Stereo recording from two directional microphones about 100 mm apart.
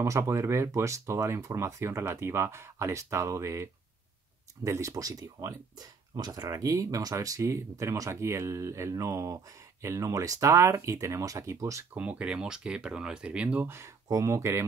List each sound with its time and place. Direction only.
0.0 s speech: 30° right (ahead or behind)
4.6 s speech: 30° right (ahead or behind)
11.9 s speech: 15° right (ahead or behind)
13.7 s speech: 25° right (ahead or behind)